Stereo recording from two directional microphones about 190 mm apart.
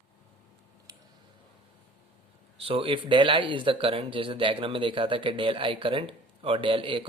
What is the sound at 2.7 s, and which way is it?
Speech, 30° right (ahead or behind).